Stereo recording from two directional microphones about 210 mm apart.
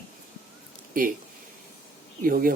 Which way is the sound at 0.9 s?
40° right (ahead or behind).